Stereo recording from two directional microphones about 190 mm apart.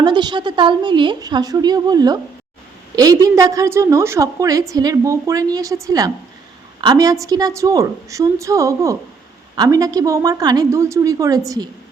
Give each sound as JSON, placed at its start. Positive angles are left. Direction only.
{"t": 0.0, "sound": "a woman's voice", "side_deg": -20}